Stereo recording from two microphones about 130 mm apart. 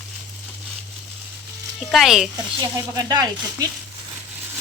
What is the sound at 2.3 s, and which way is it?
Speech, 30° right (ahead or behind).